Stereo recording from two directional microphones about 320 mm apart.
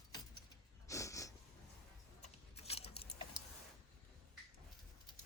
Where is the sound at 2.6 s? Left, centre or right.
Centre.